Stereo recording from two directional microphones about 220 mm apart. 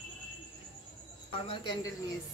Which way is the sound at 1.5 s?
20° left (ahead or behind).